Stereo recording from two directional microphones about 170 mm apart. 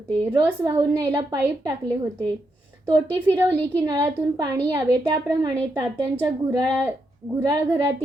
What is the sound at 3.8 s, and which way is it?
A woman's voice, 20° right (ahead or behind).